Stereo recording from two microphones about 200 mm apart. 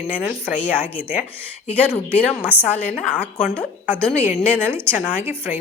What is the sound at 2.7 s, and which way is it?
Speech, 40° left (ahead or behind).